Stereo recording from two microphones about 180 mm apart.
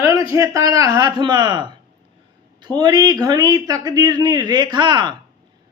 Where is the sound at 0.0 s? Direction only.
20° right (ahead or behind).